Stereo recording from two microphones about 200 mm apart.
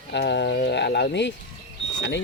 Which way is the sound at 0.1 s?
60° left (ahead or behind).